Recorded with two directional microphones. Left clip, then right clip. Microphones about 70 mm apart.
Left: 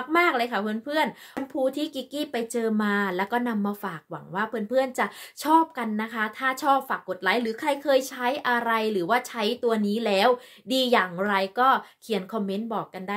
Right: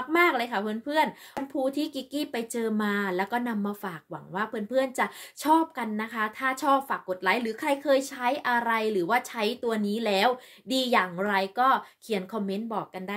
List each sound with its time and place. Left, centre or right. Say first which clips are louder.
0.1 s speech: left 1 dB; left